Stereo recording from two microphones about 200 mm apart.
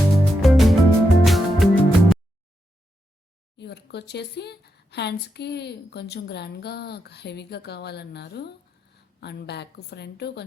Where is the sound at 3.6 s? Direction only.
55° left (ahead or behind).